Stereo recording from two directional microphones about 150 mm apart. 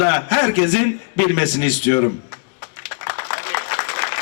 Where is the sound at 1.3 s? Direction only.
25° right (ahead or behind).